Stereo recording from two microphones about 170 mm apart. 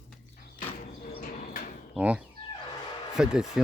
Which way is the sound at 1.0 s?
55° left (ahead or behind).